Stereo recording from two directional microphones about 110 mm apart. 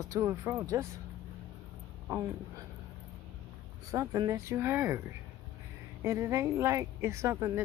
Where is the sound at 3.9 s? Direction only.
30° right (ahead or behind).